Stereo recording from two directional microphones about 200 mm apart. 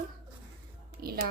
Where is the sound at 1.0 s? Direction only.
50° right (ahead or behind).